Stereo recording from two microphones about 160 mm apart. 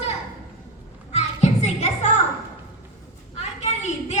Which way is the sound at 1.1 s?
45° left (ahead or behind).